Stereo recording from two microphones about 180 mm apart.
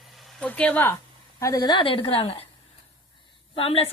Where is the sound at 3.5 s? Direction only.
30° left (ahead or behind).